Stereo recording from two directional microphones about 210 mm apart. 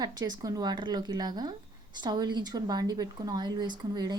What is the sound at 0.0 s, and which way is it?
Speech, 20° right (ahead or behind).